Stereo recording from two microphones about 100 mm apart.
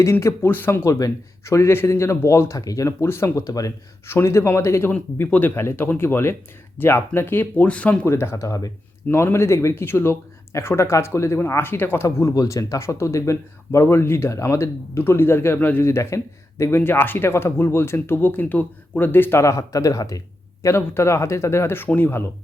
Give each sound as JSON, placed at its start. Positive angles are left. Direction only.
{"t": 0.0, "sound": "speech", "side_deg": 30}
{"t": 0.9, "sound": "speech", "side_deg": 35}
{"t": 8.0, "sound": "speech", "side_deg": 25}
{"t": 12.0, "sound": "speech", "side_deg": 35}